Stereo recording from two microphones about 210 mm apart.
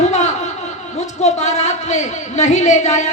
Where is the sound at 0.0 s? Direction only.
35° left (ahead or behind).